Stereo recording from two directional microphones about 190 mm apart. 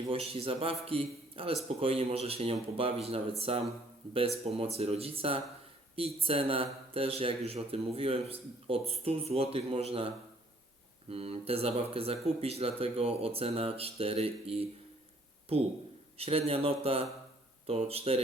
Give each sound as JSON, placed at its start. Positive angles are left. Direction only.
{"t": 0.1, "sound": "a man's voice", "side_deg": -30}
{"t": 11.1, "sound": "speech", "side_deg": -30}
{"t": 16.1, "sound": "speech", "side_deg": -30}